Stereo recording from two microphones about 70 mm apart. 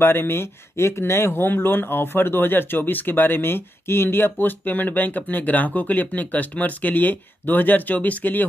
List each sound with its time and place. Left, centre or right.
0.0 s speech: left